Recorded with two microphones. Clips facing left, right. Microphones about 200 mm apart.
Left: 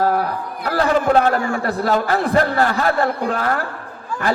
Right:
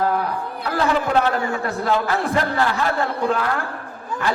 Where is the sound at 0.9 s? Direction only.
40° left (ahead or behind).